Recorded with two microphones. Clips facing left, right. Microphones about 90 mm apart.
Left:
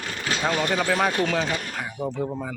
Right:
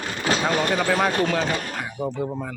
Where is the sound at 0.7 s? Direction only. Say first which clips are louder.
Right 1 dB; centre (ahead or behind).